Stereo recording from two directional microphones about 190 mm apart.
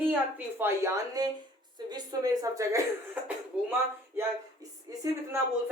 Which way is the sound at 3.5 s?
5° right (ahead or behind).